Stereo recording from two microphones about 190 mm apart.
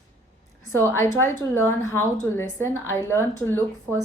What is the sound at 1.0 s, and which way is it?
A woman's voice, 15° left (ahead or behind).